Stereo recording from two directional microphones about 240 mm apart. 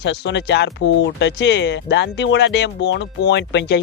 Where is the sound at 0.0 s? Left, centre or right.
Left.